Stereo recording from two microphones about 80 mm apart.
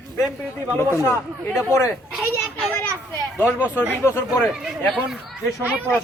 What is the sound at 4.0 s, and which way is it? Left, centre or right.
Speech, left.